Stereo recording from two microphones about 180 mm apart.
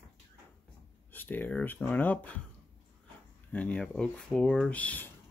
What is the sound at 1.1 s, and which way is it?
Speech, 10° left (ahead or behind).